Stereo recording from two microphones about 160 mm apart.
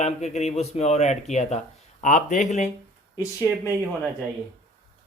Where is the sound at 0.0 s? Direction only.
45° left (ahead or behind).